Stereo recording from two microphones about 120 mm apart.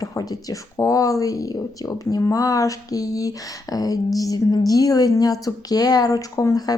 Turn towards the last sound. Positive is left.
turn(degrees=30)  # may be behind; listen again after turning